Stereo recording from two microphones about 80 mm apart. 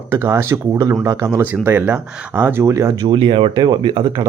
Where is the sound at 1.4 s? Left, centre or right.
Right.